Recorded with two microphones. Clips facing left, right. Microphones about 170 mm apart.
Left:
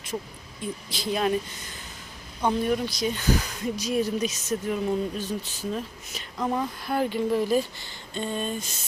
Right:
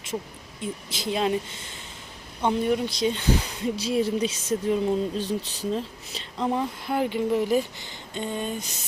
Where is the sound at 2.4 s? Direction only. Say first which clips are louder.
Right 1 dB; 20° right (ahead or behind).